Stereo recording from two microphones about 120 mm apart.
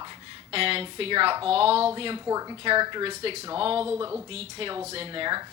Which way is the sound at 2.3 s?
30° right (ahead or behind).